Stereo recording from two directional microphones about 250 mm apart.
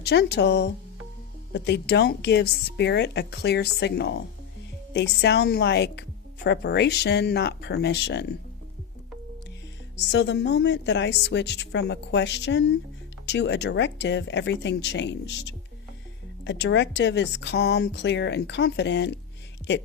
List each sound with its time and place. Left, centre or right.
0.0 s speech: left
10.0 s speech: left